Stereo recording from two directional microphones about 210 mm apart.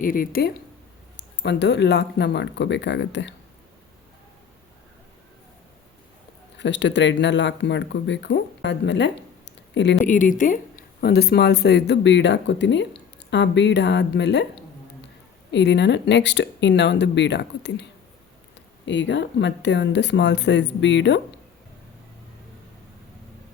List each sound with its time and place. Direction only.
0.0 s speech: 40° left (ahead or behind)
1.1 s speech: 55° left (ahead or behind)
6.6 s speech: 60° left (ahead or behind)
10.1 s speech: 40° left (ahead or behind); by 14.4 s 55° left (ahead or behind)
15.5 s speech: 55° left (ahead or behind)
18.9 s speech: 60° left (ahead or behind)